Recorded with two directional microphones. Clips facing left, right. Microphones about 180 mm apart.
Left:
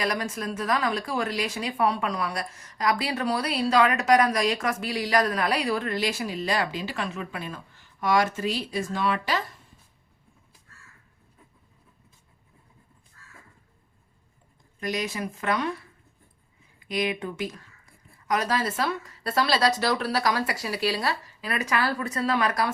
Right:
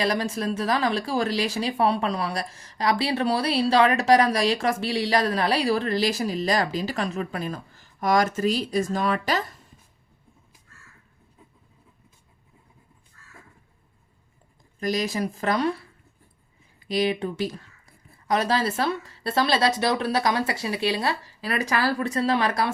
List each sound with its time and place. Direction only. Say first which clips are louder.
0.0 s speech: right 4 dB; 30° right (ahead or behind)
14.8 s speech: right 4 dB; 35° right (ahead or behind)
16.8 s speech: right 4 dB; 30° right (ahead or behind)
21.4 s speech: right 2 dB; 35° right (ahead or behind)